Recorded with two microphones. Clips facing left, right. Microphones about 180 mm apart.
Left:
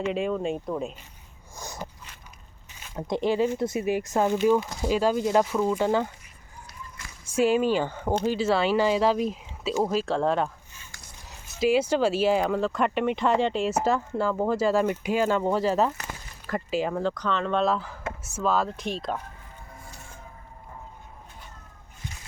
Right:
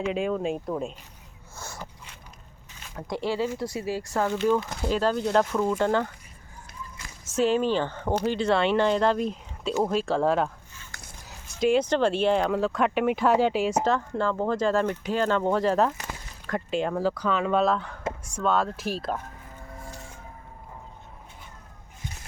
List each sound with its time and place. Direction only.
0.0 s speech: centre (ahead or behind)
1.5 s a sound: 15° left (ahead or behind)
2.9 s speech: 20° left (ahead or behind)
7.3 s speech: 10° left (ahead or behind)
13.7 s speech: 10° left (ahead or behind)